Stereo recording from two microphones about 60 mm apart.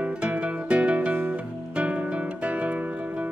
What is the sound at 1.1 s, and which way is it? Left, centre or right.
Music, right.